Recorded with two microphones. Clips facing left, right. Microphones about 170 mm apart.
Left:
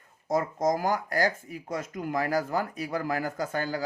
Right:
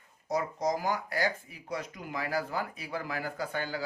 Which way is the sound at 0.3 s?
50° left (ahead or behind).